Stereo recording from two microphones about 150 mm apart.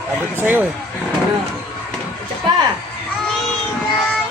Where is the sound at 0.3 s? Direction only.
10° right (ahead or behind).